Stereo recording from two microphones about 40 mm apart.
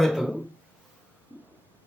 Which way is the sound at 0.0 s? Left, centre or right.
Centre.